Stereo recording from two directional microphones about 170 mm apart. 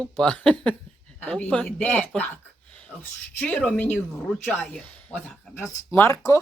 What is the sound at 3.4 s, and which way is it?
Speech, 5° left (ahead or behind).